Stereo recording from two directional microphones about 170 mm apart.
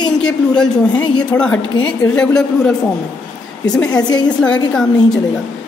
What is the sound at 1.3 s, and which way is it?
A woman's voice, 5° left (ahead or behind).